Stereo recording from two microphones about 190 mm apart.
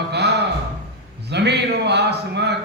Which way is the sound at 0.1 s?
60° right (ahead or behind).